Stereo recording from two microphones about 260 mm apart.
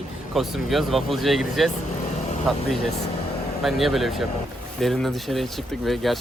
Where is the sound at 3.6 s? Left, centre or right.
Centre.